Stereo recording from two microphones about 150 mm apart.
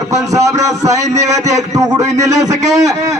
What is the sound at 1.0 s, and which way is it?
Speech, 50° right (ahead or behind).